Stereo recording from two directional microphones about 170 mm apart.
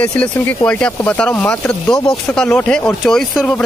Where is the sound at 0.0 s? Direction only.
10° left (ahead or behind).